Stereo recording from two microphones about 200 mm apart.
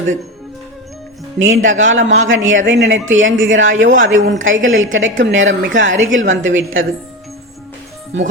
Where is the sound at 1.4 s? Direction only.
75° right (ahead or behind).